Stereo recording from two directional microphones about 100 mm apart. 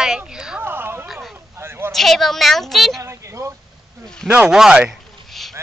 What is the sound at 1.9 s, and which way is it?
A child's voice, centre (ahead or behind).